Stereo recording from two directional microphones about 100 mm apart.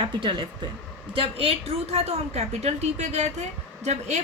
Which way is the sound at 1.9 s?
90° right.